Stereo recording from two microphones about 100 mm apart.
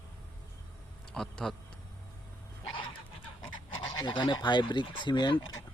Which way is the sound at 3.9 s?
45° left (ahead or behind).